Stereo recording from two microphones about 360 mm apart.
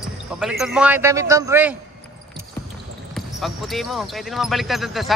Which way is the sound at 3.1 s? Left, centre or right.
Centre.